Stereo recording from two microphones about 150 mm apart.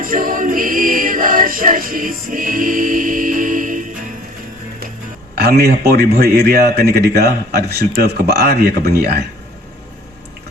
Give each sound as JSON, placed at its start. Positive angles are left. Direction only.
{"t": 0.0, "sound": "music", "side_deg": -65}
{"t": 5.3, "sound": "a man's voice", "side_deg": -90}